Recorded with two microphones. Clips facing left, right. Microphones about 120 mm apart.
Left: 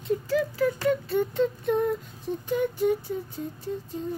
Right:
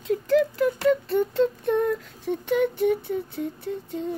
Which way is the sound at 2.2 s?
70° right (ahead or behind).